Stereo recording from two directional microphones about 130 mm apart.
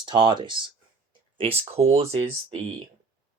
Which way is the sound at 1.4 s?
50° right (ahead or behind).